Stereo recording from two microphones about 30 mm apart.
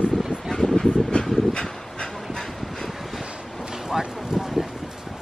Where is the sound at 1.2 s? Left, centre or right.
Left.